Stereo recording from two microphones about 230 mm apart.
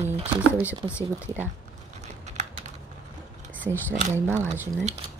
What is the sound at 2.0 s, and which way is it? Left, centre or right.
Typing, right.